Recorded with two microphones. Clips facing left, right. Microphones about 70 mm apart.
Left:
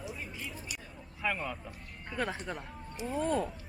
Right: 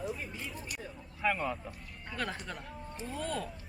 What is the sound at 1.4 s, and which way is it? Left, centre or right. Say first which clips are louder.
Speech: right 3 dB; centre.